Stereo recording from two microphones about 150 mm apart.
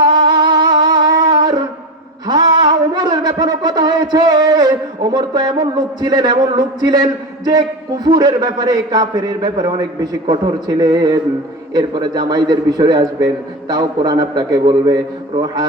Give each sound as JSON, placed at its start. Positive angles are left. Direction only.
{"t": 0.0, "sound": "music", "side_deg": -30}
{"t": 2.2, "sound": "a sound", "side_deg": -25}
{"t": 5.1, "sound": "a man's voice", "side_deg": -25}